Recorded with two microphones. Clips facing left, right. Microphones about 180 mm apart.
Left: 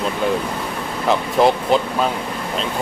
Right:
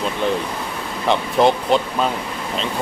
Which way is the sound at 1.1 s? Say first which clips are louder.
Even; centre (ahead or behind).